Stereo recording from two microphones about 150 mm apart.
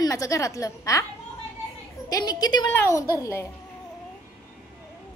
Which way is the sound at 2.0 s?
25° left (ahead or behind).